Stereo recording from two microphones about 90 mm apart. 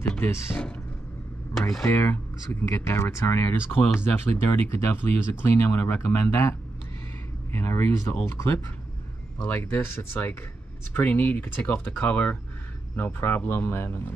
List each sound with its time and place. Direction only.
0.2 s speech: 30° left (ahead or behind)
1.5 s speech: 5° left (ahead or behind)
1.9 s speech: 30° left (ahead or behind)
7.5 s speech: 30° left (ahead or behind)